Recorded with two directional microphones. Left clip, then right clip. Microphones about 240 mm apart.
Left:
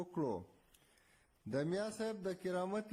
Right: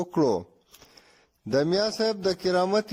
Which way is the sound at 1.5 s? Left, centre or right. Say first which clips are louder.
Right 15 dB; right.